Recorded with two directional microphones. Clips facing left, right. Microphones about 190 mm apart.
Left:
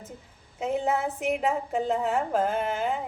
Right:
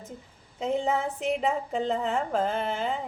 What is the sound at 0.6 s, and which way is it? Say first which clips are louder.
A woman's voice: even; 5° left (ahead or behind).